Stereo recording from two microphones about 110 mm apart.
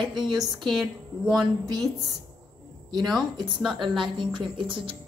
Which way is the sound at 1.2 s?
40° right (ahead or behind).